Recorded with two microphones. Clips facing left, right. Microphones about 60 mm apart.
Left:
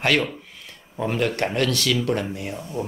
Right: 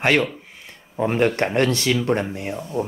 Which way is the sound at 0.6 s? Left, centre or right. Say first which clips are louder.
Right 4 dB; right.